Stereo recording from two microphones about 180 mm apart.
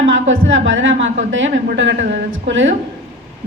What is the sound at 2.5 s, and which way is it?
Speech, 90° right.